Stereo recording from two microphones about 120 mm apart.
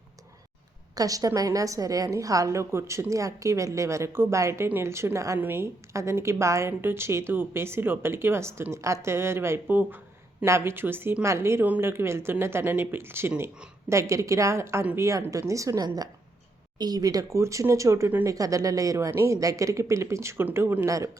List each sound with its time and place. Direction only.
0.9 s a woman's voice: 30° right (ahead or behind)